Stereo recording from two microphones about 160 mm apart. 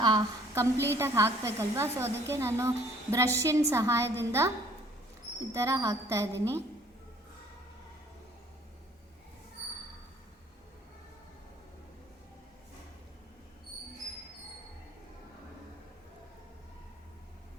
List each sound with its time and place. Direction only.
0.0 s a woman's voice: 25° right (ahead or behind)